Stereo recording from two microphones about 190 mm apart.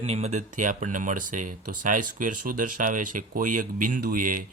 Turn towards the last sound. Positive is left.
turn(degrees=-45)  # may be behind; listen again after turning